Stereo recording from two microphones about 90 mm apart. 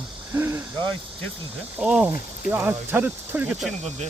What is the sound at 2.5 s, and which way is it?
Speech, 20° right (ahead or behind).